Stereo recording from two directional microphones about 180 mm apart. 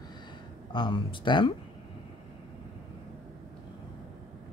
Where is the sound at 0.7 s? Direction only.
25° left (ahead or behind).